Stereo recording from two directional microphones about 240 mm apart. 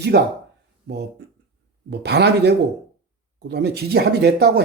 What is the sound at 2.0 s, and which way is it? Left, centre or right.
Speech, right.